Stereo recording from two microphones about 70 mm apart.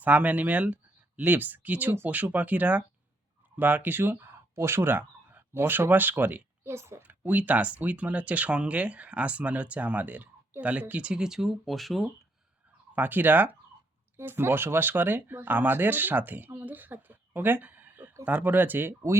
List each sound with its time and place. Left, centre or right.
0.0 s speech: right
6.7 s a woman's voice: right
7.0 s speech: right; by 12.0 s centre
12.9 s a woman's voice: right